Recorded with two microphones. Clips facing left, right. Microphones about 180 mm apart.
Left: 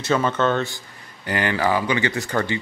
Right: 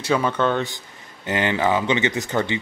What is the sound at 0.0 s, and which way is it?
Speech, 10° right (ahead or behind).